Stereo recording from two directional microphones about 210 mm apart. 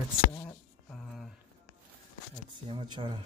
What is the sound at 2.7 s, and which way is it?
Speech, 25° right (ahead or behind).